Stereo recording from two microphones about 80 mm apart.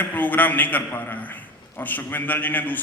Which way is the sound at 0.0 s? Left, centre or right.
Left.